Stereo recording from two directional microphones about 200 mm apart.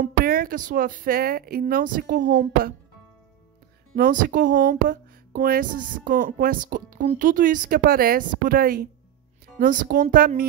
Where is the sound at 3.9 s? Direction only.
45° right (ahead or behind).